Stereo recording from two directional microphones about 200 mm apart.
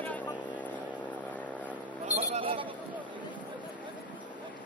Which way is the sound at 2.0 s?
35° right (ahead or behind).